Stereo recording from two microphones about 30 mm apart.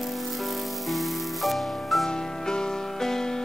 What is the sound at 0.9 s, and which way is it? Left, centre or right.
Music, centre.